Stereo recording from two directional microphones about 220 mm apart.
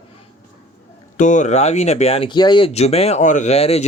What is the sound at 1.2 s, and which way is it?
Speech, 35° left (ahead or behind).